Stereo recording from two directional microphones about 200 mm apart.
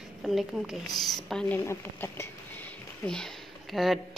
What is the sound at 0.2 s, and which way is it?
Speech, centre (ahead or behind).